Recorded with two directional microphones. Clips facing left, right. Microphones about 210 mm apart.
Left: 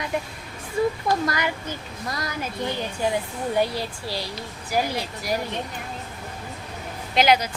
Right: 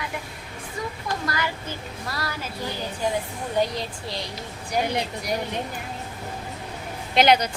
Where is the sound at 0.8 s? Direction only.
30° left (ahead or behind).